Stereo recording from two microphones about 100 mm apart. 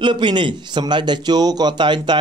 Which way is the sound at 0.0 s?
50° right (ahead or behind).